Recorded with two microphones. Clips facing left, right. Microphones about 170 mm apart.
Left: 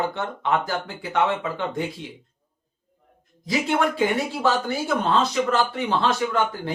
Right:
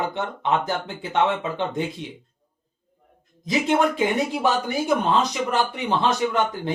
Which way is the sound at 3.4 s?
20° right (ahead or behind).